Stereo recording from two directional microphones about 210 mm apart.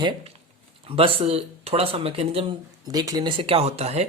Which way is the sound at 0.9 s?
25° right (ahead or behind).